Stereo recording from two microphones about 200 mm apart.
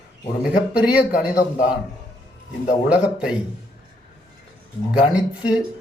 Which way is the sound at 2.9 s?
5° right (ahead or behind).